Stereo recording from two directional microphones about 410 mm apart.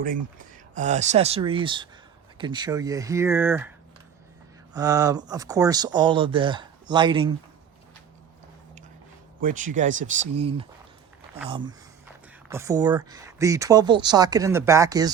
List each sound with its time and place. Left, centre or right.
0.0 s speech: centre
4.7 s speech: centre
9.4 s speech: centre